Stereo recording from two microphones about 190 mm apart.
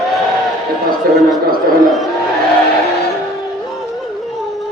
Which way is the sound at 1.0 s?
55° right (ahead or behind).